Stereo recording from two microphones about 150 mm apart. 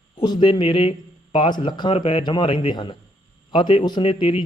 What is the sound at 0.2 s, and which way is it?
Speech, 30° left (ahead or behind).